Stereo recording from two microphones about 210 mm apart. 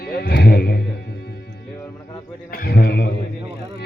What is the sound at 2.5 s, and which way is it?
Mantra, 50° left (ahead or behind).